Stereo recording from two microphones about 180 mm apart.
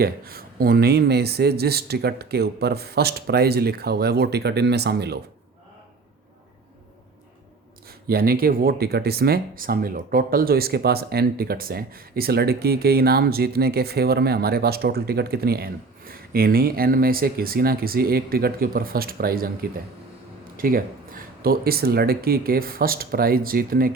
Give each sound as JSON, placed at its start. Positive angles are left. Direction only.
{"t": 0.0, "sound": "speech", "side_deg": -55}
{"t": 7.9, "sound": "speech", "side_deg": -55}